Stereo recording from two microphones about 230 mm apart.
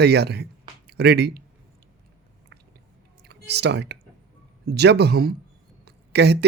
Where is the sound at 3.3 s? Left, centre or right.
Right.